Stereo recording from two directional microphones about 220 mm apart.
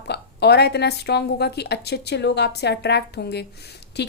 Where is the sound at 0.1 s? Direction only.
50° left (ahead or behind).